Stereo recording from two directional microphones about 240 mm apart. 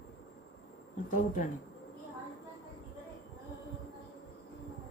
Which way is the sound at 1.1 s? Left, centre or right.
Left.